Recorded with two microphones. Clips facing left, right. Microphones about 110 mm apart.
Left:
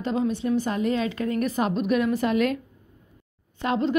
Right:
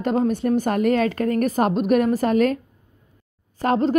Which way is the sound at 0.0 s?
50° right (ahead or behind).